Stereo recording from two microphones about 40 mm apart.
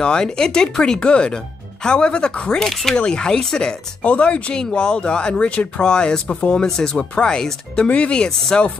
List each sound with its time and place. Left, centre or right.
0.0 s speech: centre
2.6 s speech: centre
3.1 s speech: centre
4.0 s speech: left
4.6 s speech: left